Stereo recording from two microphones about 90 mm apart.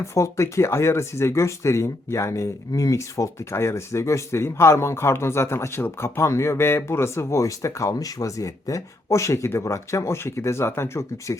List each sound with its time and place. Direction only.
0.0 s speech: 35° left (ahead or behind)